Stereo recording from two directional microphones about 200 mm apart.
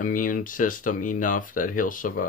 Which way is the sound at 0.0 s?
40° left (ahead or behind).